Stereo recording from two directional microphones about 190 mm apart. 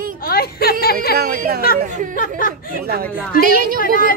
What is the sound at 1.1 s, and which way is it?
Speech, 55° right (ahead or behind).